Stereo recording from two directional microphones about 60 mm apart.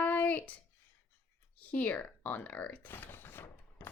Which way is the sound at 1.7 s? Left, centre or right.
Left.